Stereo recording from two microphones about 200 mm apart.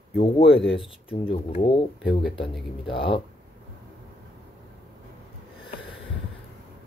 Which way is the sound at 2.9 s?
25° left (ahead or behind).